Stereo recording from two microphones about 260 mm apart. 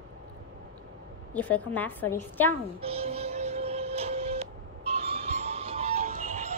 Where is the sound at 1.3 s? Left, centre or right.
Centre.